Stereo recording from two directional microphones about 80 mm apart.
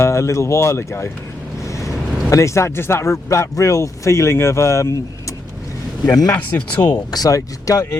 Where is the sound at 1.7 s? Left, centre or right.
Left.